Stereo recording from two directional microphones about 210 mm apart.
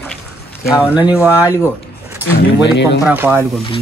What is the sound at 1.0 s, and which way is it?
Speech, 20° left (ahead or behind).